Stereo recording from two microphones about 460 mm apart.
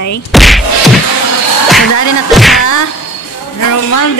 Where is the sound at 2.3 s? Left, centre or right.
Centre.